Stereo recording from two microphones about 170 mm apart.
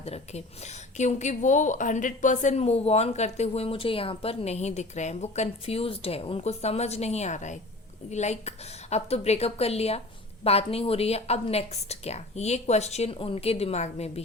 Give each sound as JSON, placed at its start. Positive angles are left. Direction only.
{"t": 0.0, "sound": "a woman's voice", "side_deg": 40}